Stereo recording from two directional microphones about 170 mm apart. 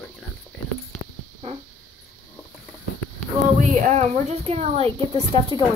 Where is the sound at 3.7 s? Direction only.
45° right (ahead or behind).